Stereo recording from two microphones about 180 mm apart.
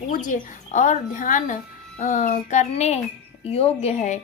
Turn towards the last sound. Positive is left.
turn(degrees=40)  # may be behind; listen again after turning